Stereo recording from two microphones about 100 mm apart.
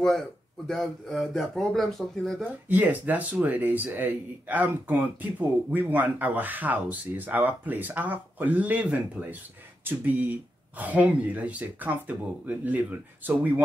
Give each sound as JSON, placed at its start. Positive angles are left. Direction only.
{"t": 0.7, "sound": "speech", "side_deg": 5}
{"t": 2.7, "sound": "speech", "side_deg": -15}